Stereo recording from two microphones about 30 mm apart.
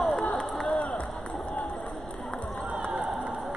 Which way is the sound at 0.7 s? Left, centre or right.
Left.